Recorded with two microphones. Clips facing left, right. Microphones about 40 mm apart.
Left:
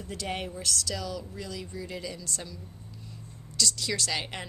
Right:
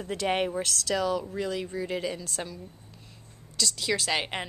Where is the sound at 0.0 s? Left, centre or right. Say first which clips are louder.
Right 7 dB; right.